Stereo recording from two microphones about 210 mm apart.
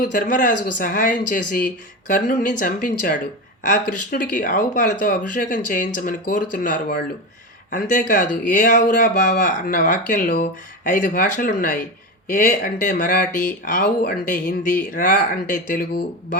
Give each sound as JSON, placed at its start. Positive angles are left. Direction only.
{"t": 0.1, "sound": "speech", "side_deg": 40}
{"t": 0.5, "sound": "speech", "side_deg": 55}
{"t": 0.8, "sound": "speech", "side_deg": 40}